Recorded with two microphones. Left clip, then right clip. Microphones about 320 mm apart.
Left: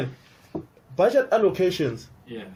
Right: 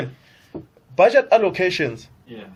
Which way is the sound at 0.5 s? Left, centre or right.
Left.